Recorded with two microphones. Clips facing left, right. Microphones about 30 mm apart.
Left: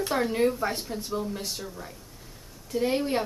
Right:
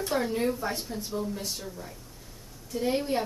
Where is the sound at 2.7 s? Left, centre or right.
Left.